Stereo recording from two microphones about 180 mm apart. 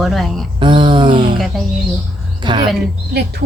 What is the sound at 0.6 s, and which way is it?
Speech, 25° right (ahead or behind).